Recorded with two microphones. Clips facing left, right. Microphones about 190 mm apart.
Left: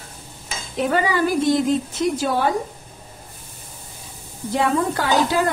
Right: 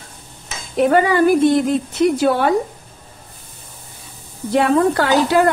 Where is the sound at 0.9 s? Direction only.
55° right (ahead or behind).